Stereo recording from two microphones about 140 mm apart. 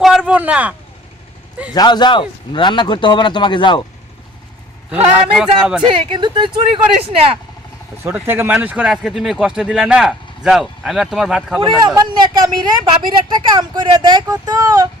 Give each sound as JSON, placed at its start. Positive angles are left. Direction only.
{"t": 0.0, "sound": "a sound", "side_deg": -5}
{"t": 1.7, "sound": "a man's voice", "side_deg": 30}
{"t": 5.4, "sound": "speech", "side_deg": -5}
{"t": 5.8, "sound": "speech", "side_deg": -35}
{"t": 8.0, "sound": "speech", "side_deg": -15}
{"t": 11.6, "sound": "speech", "side_deg": -30}